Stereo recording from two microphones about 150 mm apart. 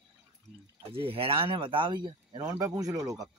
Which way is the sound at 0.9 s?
40° right (ahead or behind).